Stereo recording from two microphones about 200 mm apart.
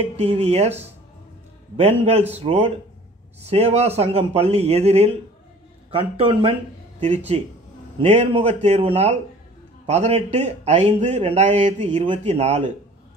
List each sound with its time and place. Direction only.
0.2 s a man's voice: 30° right (ahead or behind)
1.8 s a man's voice: 30° right (ahead or behind)